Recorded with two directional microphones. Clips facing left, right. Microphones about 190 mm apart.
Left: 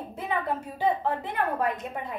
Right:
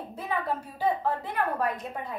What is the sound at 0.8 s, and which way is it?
Speech, 20° left (ahead or behind).